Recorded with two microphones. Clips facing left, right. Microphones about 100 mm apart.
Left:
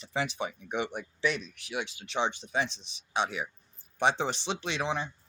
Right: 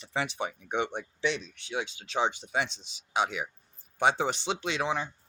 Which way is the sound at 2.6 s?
90° right.